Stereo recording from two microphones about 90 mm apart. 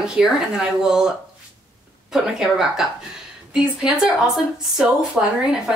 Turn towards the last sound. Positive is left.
turn(degrees=-5)  # may be behind; listen again after turning